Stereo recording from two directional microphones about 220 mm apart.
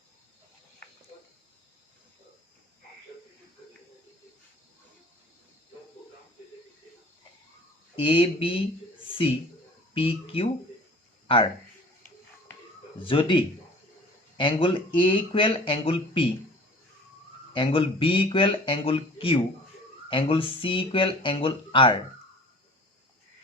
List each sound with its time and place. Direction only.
7.9 s speech: 25° left (ahead or behind)
9.9 s speech: 25° left (ahead or behind)
13.0 s speech: 25° left (ahead or behind)
17.5 s speech: 25° left (ahead or behind)